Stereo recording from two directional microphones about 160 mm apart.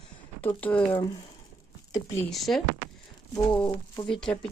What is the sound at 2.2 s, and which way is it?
Speech, centre (ahead or behind).